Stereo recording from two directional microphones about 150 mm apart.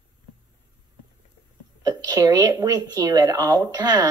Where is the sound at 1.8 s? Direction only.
25° right (ahead or behind).